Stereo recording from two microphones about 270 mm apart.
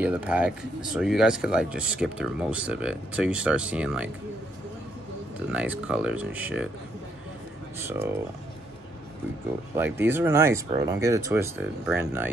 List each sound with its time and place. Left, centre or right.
0.0 s speech: centre
5.5 s speech: centre
7.8 s speech: centre
9.8 s speech: centre